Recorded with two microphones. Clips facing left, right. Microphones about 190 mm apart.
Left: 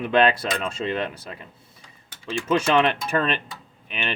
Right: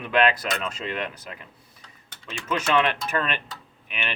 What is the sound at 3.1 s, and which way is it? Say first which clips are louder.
Speech: left 4 dB; 30° left (ahead or behind).